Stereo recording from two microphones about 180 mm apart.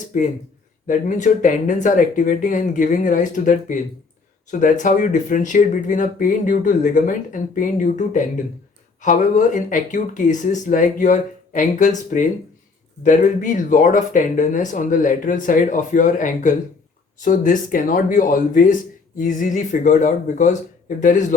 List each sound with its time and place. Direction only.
0.1 s speech: 45° left (ahead or behind)